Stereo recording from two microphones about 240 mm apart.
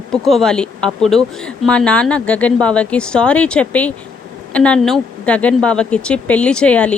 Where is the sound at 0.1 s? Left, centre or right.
Centre.